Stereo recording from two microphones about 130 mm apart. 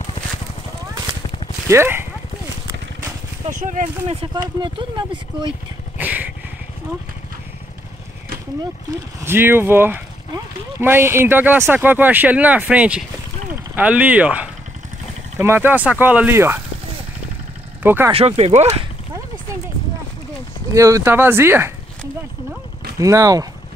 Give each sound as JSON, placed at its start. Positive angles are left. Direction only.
{"t": 1.7, "sound": "speech", "side_deg": -20}
{"t": 3.4, "sound": "speech", "side_deg": -75}
{"t": 4.3, "sound": "speech", "side_deg": -35}
{"t": 5.9, "sound": "vehicle", "side_deg": -15}
{"t": 9.2, "sound": "speech", "side_deg": -15}
{"t": 17.8, "sound": "speech", "side_deg": -15}
{"t": 18.1, "sound": "speech", "side_deg": -50}
{"t": 20.7, "sound": "speech", "side_deg": -25}
{"t": 22.9, "sound": "speech", "side_deg": -25}